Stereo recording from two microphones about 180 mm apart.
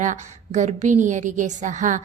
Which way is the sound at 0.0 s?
45° right (ahead or behind).